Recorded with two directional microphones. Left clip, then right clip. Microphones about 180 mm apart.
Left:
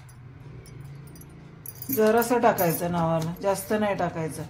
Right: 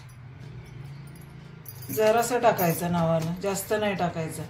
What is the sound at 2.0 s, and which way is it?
Speech, 45° left (ahead or behind).